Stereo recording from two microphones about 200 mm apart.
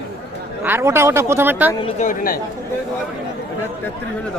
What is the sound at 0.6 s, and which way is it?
Speech, 10° right (ahead or behind).